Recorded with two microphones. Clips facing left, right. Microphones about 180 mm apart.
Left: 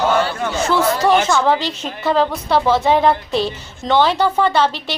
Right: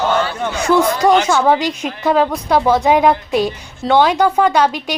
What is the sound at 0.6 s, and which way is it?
A woman's voice, 15° right (ahead or behind).